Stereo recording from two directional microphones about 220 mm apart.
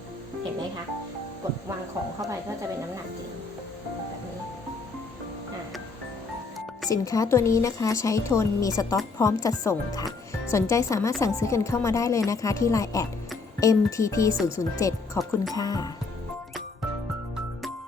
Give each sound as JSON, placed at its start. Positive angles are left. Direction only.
{"t": 6.9, "sound": "a woman's voice", "side_deg": 15}